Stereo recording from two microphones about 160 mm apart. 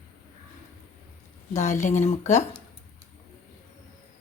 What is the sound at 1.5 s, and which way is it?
Speech, 45° left (ahead or behind).